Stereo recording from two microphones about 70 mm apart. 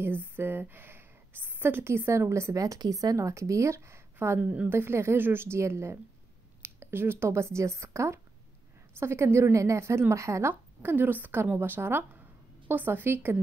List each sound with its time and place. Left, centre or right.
0.4 s a woman's voice: right
2.5 s a woman's voice: right
4.4 s speech: right
4.6 s a woman's voice: right
10.5 s a woman's voice: right